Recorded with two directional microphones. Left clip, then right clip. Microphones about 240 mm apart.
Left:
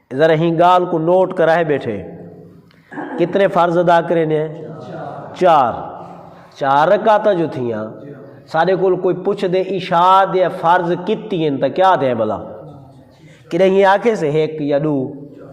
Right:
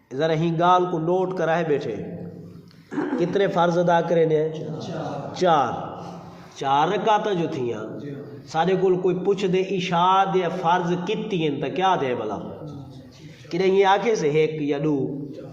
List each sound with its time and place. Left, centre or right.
0.1 s a man's voice: left
3.2 s a man's voice: left
13.5 s a man's voice: left